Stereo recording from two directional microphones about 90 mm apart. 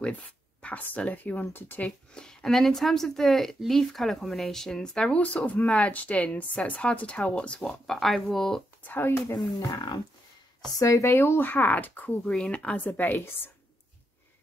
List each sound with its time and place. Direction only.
0.6 s a woman's voice: 15° left (ahead or behind)
2.1 s speech: 5° left (ahead or behind)
8.8 s speech: 20° left (ahead or behind)
9.6 s speech: 50° left (ahead or behind)
10.8 s a woman's voice: 35° left (ahead or behind)